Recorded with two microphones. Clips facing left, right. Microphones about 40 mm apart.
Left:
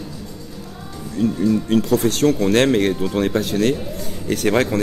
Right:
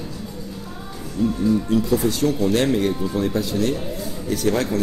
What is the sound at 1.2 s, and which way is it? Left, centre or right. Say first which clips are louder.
Speech: left 1 dB; left.